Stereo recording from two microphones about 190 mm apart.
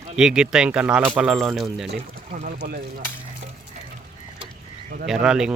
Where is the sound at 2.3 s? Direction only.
45° right (ahead or behind).